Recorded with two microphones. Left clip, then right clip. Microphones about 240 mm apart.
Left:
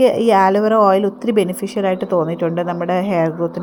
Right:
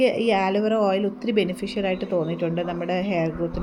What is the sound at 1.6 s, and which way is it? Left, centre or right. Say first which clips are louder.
Speech: left 6 dB; left.